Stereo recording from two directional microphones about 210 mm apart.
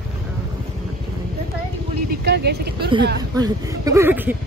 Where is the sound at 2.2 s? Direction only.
50° right (ahead or behind).